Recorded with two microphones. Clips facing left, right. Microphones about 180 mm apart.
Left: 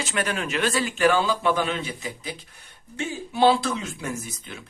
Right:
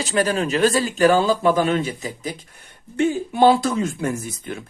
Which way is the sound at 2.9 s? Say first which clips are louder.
Right 10 dB; 55° right (ahead or behind).